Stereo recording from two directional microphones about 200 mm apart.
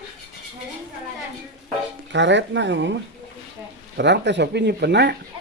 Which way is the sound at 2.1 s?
65° right (ahead or behind).